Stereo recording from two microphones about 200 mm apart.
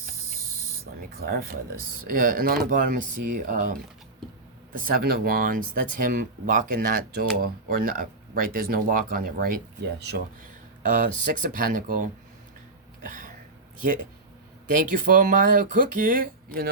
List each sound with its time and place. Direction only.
1.1 s speech: 50° right (ahead or behind)
13.0 s a sound: 40° right (ahead or behind)
14.7 s speech: 40° right (ahead or behind)